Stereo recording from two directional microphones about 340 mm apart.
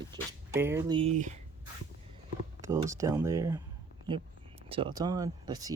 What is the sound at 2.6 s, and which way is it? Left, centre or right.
Speech, centre.